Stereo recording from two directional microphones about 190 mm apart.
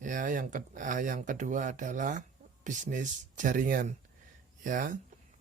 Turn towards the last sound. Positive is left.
turn(degrees=-45)  # may be behind; listen again after turning